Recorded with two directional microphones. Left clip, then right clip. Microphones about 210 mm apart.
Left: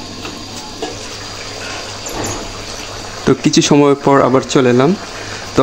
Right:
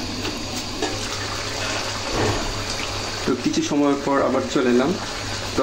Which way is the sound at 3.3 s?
50° left (ahead or behind).